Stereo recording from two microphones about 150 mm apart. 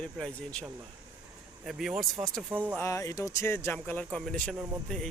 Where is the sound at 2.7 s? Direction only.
20° left (ahead or behind).